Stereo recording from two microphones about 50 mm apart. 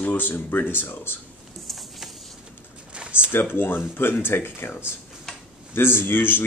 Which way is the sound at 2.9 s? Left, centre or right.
Right.